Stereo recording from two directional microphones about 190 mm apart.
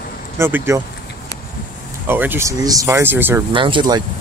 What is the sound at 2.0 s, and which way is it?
Speech, 10° right (ahead or behind).